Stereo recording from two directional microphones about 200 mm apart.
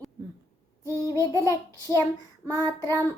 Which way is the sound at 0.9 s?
15° left (ahead or behind).